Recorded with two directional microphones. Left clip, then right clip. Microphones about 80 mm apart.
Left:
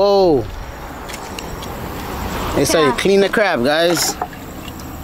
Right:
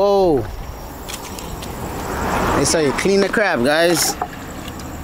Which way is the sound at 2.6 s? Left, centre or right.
Centre.